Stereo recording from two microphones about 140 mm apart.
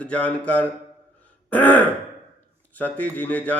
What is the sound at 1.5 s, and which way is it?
Throat clearing, 10° left (ahead or behind).